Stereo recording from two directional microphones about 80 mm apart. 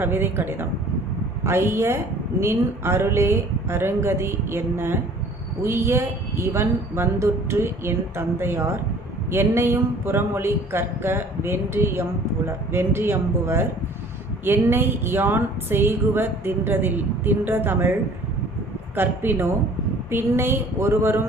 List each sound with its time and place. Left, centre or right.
0.0 s speech: right
18.9 s speech: right